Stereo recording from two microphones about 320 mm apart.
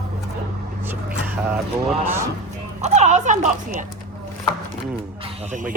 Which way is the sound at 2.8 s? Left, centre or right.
Right.